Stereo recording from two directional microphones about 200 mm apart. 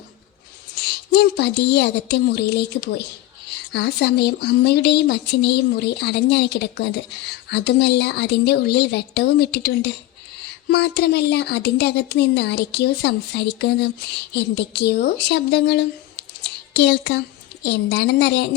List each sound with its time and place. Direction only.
0.8 s a woman's voice: 55° left (ahead or behind)